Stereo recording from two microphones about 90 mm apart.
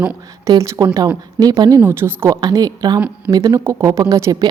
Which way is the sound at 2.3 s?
50° right (ahead or behind).